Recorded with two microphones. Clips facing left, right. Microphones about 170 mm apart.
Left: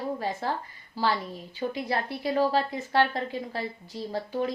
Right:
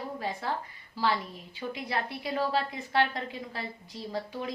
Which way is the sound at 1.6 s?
35° left (ahead or behind).